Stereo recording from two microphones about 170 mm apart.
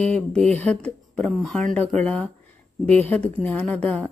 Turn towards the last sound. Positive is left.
turn(degrees=5)  # may be behind; listen again after turning